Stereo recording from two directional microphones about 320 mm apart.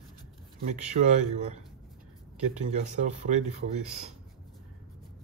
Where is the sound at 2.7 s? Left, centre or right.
Right.